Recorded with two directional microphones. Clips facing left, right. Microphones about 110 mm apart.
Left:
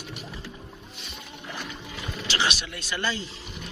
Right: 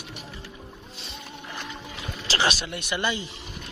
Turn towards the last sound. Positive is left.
turn(degrees=-15)  # may be behind; listen again after turning